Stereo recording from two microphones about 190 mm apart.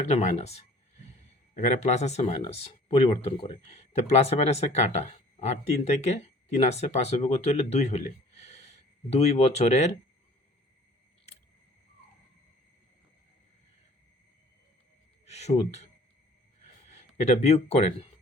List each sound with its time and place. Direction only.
0.0 s speech: 35° left (ahead or behind)
15.3 s speech: 35° left (ahead or behind)
16.9 s speech: 35° left (ahead or behind)